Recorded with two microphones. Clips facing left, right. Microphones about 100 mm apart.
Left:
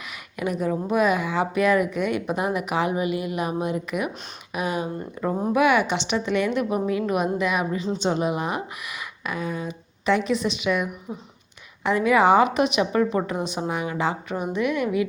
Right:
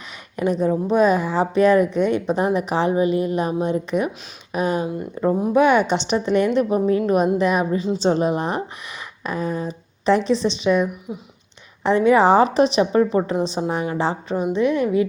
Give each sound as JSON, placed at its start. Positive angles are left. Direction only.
{"t": 0.3, "sound": "a woman's voice", "side_deg": -30}
{"t": 11.1, "sound": "speech", "side_deg": 35}
{"t": 11.8, "sound": "a woman's voice", "side_deg": -30}